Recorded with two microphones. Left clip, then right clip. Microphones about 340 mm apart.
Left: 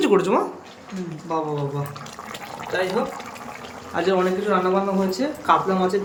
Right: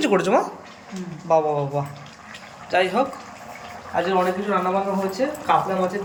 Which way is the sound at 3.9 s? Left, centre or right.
Centre.